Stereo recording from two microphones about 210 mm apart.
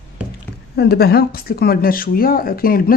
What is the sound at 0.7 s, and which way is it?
Speech, 50° left (ahead or behind).